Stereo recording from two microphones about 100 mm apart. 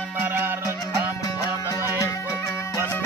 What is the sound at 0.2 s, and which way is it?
Music, 20° right (ahead or behind).